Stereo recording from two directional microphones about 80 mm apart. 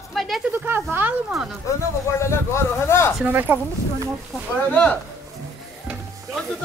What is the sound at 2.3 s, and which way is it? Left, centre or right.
Speech, left.